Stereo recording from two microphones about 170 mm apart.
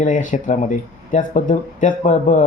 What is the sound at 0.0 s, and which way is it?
Speech, 50° left (ahead or behind).